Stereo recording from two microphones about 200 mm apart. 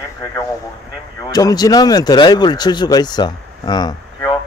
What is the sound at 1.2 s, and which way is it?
Speech, 20° left (ahead or behind).